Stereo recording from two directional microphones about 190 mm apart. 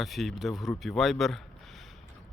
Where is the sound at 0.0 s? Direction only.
Centre (ahead or behind).